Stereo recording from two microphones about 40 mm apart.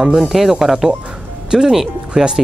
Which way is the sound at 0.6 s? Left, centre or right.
Centre.